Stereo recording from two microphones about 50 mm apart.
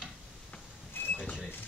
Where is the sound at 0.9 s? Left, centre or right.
Left.